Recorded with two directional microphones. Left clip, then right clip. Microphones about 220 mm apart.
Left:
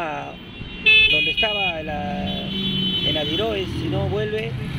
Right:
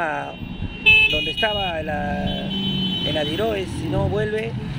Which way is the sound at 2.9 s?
55° right (ahead or behind).